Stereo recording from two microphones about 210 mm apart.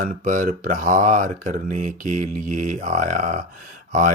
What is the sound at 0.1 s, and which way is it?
Speech, 40° right (ahead or behind).